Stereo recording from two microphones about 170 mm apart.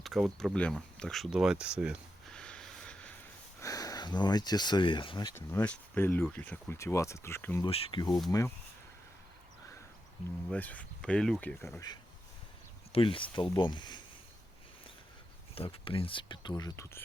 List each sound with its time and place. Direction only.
0.0 s speech: centre (ahead or behind)
2.3 s a sound: 5° left (ahead or behind)
3.6 s speech: 20° left (ahead or behind)
5.3 s speech: 15° left (ahead or behind)
7.6 s speech: 30° left (ahead or behind)
10.5 s speech: 10° left (ahead or behind)
12.9 s speech: 30° left (ahead or behind)
15.5 s speech: 35° left (ahead or behind); by 17.0 s 15° left (ahead or behind)